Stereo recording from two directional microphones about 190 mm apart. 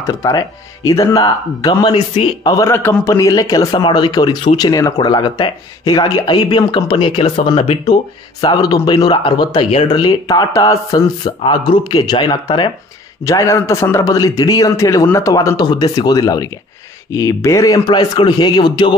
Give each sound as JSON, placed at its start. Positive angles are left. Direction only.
{"t": 0.0, "sound": "speech", "side_deg": 15}